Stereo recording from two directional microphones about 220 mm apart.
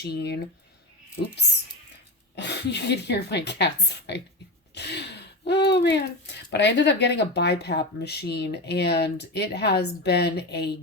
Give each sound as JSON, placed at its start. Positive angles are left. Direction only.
{"t": 0.0, "sound": "speech", "side_deg": 45}
{"t": 2.3, "sound": "speech", "side_deg": 50}